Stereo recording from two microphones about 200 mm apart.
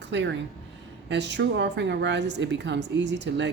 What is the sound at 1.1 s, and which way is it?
A woman's voice, 60° right (ahead or behind).